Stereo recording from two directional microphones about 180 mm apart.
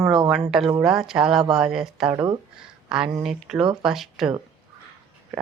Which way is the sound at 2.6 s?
5° right (ahead or behind).